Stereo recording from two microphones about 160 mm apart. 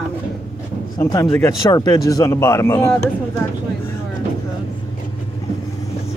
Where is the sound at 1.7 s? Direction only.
25° left (ahead or behind).